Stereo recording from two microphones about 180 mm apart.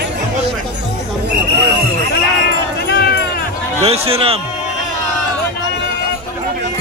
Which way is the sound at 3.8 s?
35° right (ahead or behind).